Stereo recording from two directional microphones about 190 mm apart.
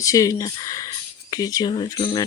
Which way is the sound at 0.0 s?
15° left (ahead or behind).